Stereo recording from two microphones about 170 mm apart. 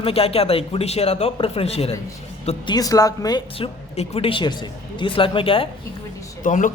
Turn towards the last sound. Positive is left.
turn(degrees=50)  # may be behind; listen again after turning